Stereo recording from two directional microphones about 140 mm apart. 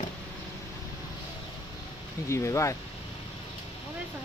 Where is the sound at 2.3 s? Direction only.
20° left (ahead or behind).